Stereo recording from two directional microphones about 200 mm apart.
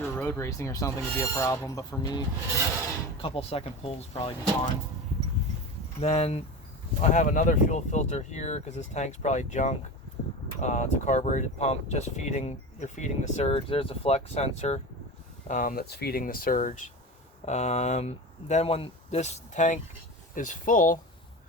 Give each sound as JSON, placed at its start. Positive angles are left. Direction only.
{"t": 0.0, "sound": "speech", "side_deg": 10}
{"t": 6.0, "sound": "speech", "side_deg": 30}